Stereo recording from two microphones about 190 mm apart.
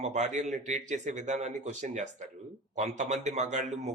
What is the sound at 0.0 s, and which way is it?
Speech, 35° right (ahead or behind).